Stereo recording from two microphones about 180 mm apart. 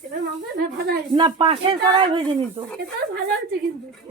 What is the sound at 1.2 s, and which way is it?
Speech, 25° right (ahead or behind).